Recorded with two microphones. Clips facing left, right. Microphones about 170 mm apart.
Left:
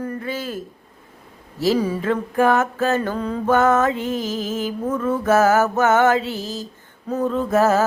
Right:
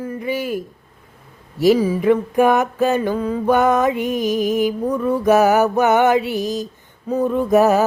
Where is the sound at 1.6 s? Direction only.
10° right (ahead or behind).